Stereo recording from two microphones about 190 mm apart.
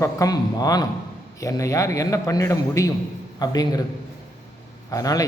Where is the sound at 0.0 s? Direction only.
20° left (ahead or behind).